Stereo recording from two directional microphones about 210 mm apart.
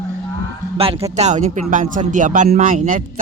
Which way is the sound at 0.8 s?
25° right (ahead or behind).